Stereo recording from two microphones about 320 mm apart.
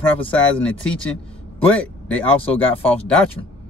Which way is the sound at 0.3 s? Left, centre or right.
Centre.